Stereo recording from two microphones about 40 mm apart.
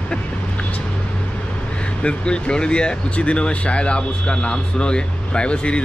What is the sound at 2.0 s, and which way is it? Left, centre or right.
Speech, left.